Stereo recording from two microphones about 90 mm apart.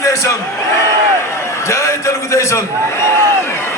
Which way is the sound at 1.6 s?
35° left (ahead or behind).